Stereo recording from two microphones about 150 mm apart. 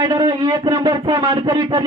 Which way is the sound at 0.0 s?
30° right (ahead or behind).